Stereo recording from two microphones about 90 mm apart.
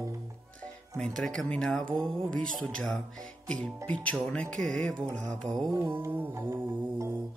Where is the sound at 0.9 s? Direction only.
10° left (ahead or behind).